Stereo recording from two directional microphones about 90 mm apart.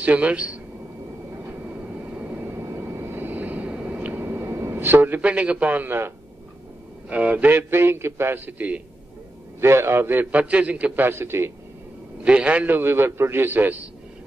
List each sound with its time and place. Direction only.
0.0 s a man's voice: 15° right (ahead or behind)
2.1 s vehicle: 20° right (ahead or behind)
7.1 s a man's voice: 15° right (ahead or behind)
9.6 s a man's voice: 30° right (ahead or behind)
11.1 s a man's voice: 25° right (ahead or behind)
12.2 s a man's voice: 15° right (ahead or behind)